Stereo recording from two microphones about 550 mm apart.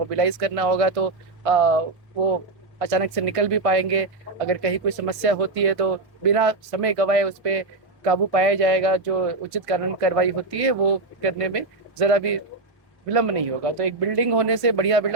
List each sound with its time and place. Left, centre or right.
0.1 s speech: right